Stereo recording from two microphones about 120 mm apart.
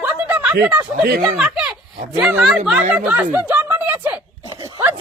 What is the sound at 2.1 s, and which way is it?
Speech, 5° right (ahead or behind).